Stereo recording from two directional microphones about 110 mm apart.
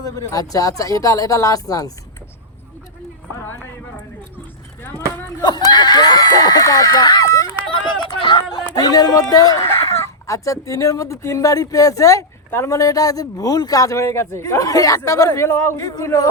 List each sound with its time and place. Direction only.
0.0 s speech: 30° left (ahead or behind)
3.3 s clip-clop: 20° left (ahead or behind)
4.8 s a sound: 20° left (ahead or behind)
5.4 s a sound: 40° left (ahead or behind)
6.7 s speech: 30° left (ahead or behind)
8.2 s chatter: 40° left (ahead or behind)
9.3 s speech: 35° left (ahead or behind)
15.5 s speech: 15° left (ahead or behind)
15.8 s speech: 30° left (ahead or behind)